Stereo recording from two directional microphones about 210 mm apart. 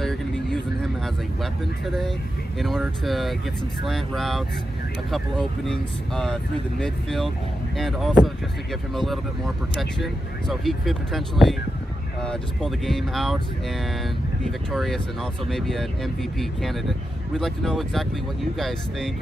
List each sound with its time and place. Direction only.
0.0 s vehicle: centre (ahead or behind)
2.6 s speech: centre (ahead or behind)
5.7 s speech: 5° left (ahead or behind)
14.4 s speech: centre (ahead or behind)